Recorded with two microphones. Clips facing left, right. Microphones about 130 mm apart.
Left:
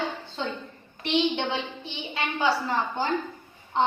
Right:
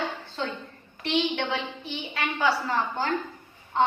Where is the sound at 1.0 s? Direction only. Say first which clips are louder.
Left 1 dB; 25° left (ahead or behind).